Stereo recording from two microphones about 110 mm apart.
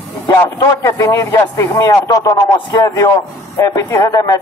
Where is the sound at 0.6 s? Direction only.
30° left (ahead or behind).